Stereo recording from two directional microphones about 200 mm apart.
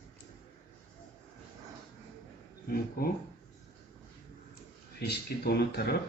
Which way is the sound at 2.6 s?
50° left (ahead or behind).